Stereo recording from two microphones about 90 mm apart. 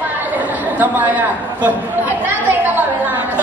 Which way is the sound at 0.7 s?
20° right (ahead or behind).